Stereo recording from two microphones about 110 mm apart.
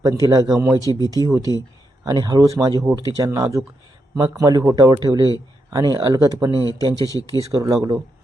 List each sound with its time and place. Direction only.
0.0 s speech: 35° right (ahead or behind)
6.5 s speech: 35° left (ahead or behind)
7.5 s speech: 35° right (ahead or behind)